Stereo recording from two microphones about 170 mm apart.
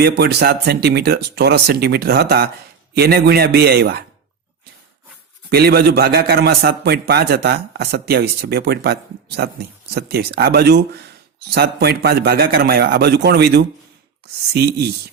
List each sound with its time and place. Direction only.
0.0 s a man's voice: 70° right (ahead or behind)
5.5 s a man's voice: 65° right (ahead or behind)